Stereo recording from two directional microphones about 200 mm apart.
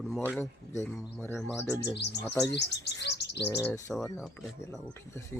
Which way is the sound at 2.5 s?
55° left (ahead or behind).